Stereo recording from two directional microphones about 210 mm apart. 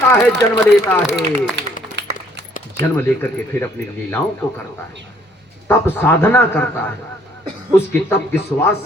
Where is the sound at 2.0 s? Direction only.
60° right (ahead or behind).